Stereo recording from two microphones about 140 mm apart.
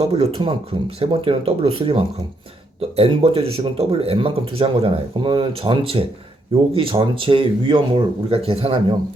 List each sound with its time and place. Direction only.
0.0 s a man's voice: 45° right (ahead or behind)